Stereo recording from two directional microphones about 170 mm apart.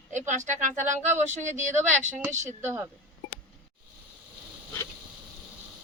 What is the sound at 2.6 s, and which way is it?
Speech, 15° right (ahead or behind).